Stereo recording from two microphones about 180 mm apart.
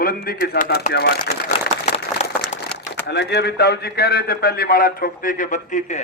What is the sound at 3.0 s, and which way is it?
A man's voice, 70° left (ahead or behind).